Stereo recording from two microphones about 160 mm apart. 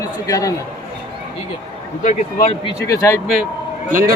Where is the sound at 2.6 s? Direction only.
20° left (ahead or behind).